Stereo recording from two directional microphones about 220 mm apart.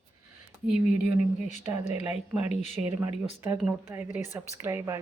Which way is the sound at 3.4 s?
5° right (ahead or behind).